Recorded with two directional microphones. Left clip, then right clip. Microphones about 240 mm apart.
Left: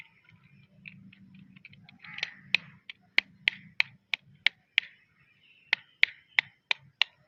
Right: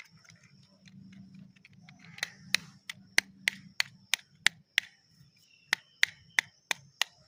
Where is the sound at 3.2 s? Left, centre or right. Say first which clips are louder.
Left 2 dB; centre.